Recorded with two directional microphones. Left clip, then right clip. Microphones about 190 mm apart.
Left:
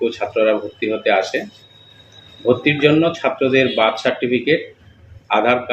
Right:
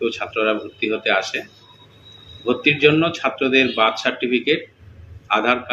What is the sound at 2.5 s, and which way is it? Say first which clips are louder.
A man's voice: left 1 dB; 15° left (ahead or behind).